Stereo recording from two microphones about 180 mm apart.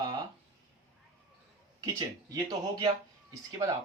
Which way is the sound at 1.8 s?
20° right (ahead or behind).